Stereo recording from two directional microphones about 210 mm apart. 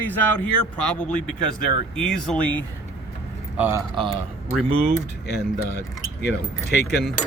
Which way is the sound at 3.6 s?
10° right (ahead or behind).